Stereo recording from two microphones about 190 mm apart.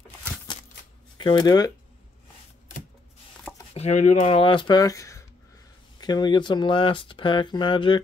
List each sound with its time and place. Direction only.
1.1 s speech: 25° left (ahead or behind)
3.7 s speech: 35° left (ahead or behind)